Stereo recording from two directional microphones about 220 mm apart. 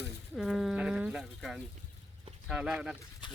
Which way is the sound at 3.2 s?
20° left (ahead or behind).